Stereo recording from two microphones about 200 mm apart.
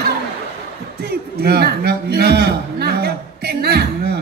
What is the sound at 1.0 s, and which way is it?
A man's voice, 50° right (ahead or behind).